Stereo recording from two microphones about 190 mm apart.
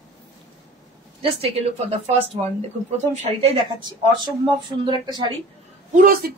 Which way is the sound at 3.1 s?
30° right (ahead or behind).